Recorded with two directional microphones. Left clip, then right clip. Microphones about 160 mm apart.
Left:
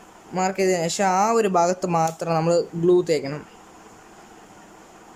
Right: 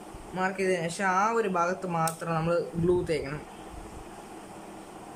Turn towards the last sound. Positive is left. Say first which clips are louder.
# left 8 dB
turn(degrees=25)  # may be behind; listen again after turning